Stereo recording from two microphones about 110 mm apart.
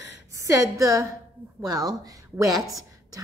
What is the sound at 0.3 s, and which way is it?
A woman's voice, 30° right (ahead or behind).